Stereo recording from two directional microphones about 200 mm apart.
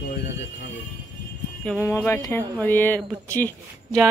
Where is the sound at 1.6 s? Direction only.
10° left (ahead or behind).